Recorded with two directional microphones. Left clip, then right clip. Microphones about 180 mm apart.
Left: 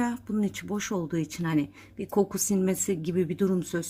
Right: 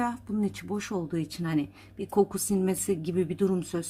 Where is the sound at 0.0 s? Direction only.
15° left (ahead or behind).